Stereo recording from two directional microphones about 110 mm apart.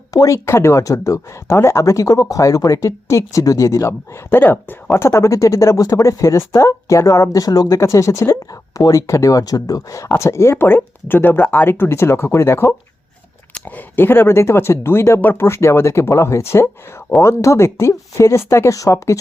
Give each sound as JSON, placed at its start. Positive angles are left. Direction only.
{"t": 0.1, "sound": "speech", "side_deg": 30}